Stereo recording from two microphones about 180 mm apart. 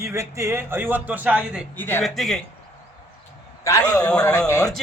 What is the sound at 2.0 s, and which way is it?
Speech, centre (ahead or behind).